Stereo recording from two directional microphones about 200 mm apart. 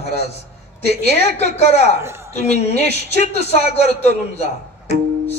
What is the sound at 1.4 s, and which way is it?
Speech, 35° left (ahead or behind).